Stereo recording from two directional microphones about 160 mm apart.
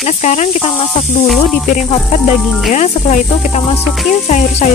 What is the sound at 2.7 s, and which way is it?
A woman's voice, 45° left (ahead or behind).